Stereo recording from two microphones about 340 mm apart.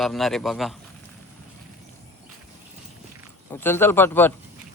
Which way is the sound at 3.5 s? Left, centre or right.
Centre.